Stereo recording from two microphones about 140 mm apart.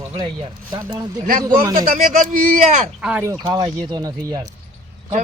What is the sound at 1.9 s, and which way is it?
A man's voice, 70° right (ahead or behind).